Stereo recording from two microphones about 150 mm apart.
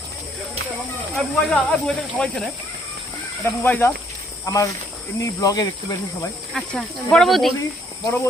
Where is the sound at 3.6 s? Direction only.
15° left (ahead or behind).